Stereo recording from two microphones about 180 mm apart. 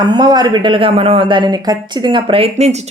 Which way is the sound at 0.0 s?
25° right (ahead or behind).